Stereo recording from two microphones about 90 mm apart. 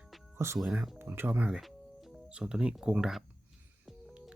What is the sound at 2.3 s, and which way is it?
Speech, 10° right (ahead or behind).